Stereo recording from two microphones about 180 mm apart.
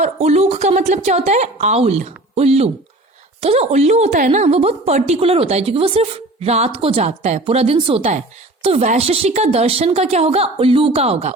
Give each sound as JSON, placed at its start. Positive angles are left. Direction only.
{"t": 0.0, "sound": "a woman's voice", "side_deg": -40}